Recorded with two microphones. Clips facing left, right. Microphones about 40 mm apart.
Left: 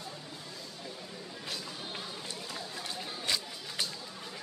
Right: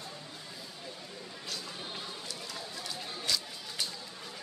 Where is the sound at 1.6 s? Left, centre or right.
Centre.